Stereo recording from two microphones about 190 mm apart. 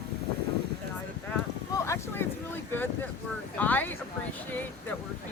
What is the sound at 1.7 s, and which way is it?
Boat, 15° left (ahead or behind).